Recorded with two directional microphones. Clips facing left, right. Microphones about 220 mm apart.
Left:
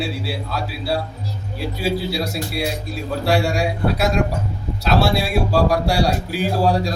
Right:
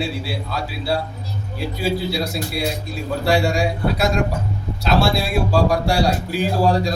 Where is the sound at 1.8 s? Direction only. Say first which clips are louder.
Even; 5° left (ahead or behind).